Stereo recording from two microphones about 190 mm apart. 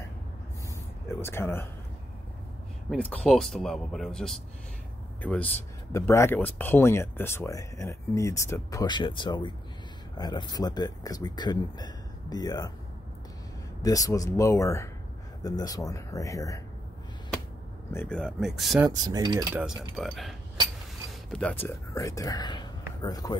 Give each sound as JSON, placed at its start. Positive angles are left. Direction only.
{"t": 1.0, "sound": "speech", "side_deg": 15}
{"t": 2.9, "sound": "speech", "side_deg": 5}
{"t": 13.8, "sound": "speech", "side_deg": 20}
{"t": 17.9, "sound": "speech", "side_deg": 5}
{"t": 18.9, "sound": "mechanisms", "side_deg": -20}
{"t": 19.5, "sound": "speech", "side_deg": -5}